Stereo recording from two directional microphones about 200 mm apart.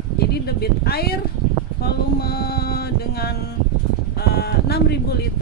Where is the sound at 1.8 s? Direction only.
50° left (ahead or behind).